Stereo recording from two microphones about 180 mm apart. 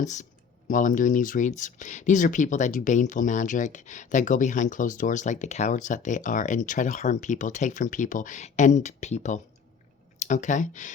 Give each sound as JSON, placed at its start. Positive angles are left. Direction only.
{"t": 0.0, "sound": "speech", "side_deg": 40}